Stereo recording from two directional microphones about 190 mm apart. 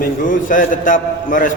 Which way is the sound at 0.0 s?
45° left (ahead or behind).